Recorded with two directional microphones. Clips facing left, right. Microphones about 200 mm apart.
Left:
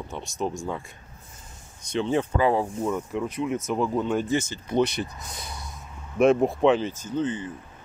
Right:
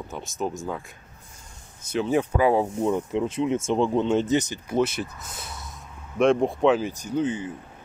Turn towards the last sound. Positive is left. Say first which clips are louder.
# right 2 dB
turn(degrees=-10)  # may be behind; listen again after turning